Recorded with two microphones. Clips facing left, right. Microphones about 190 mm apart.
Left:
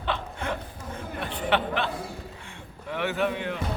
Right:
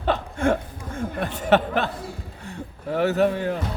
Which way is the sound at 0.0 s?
45° right (ahead or behind).